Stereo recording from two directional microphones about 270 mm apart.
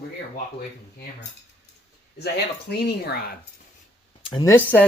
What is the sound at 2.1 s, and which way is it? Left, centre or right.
Speech, left.